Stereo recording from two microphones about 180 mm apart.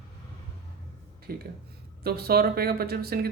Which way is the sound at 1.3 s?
55° right (ahead or behind).